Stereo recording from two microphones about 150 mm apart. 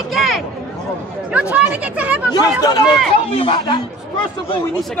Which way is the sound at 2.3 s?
30° left (ahead or behind).